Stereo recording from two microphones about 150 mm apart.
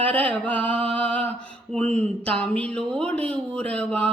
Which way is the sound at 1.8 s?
50° right (ahead or behind).